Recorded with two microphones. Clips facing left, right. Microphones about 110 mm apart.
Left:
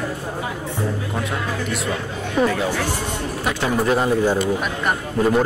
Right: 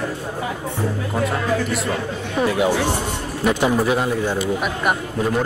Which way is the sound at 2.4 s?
15° right (ahead or behind).